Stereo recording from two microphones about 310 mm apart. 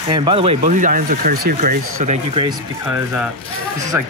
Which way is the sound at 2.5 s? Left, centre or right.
Centre.